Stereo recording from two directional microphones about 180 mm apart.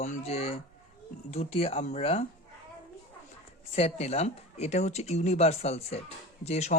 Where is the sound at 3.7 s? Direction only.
35° left (ahead or behind).